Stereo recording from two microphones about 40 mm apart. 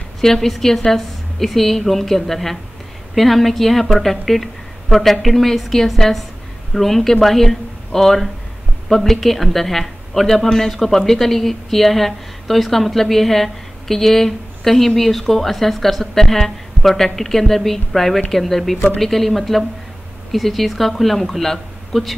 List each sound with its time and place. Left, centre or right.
0.2 s a woman's voice: centre